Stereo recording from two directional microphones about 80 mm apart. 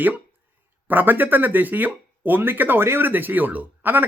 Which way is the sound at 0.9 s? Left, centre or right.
Right.